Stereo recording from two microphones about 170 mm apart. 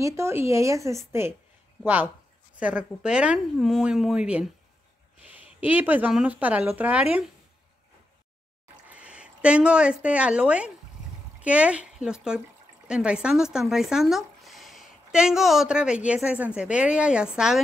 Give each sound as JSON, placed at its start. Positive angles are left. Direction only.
{"t": 0.0, "sound": "speech", "side_deg": -15}
{"t": 2.6, "sound": "a woman's voice", "side_deg": -5}
{"t": 8.8, "sound": "speech", "side_deg": -5}